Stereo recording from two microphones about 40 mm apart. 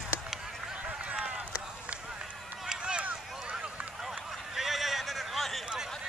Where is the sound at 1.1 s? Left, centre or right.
Centre.